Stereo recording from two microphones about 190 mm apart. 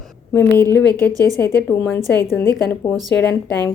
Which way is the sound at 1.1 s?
20° right (ahead or behind).